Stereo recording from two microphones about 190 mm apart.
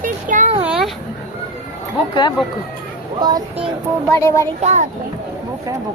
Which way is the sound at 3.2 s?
20° right (ahead or behind).